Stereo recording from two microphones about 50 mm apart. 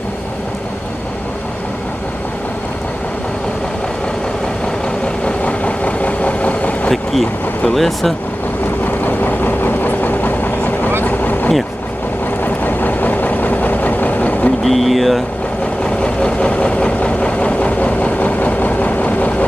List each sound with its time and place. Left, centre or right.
5.2 s vehicle: left
6.9 s speech: centre
9.0 s vehicle: left
14.6 s speech: centre
15.8 s vehicle: centre